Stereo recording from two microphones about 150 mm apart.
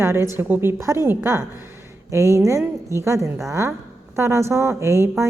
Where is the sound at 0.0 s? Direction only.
15° right (ahead or behind).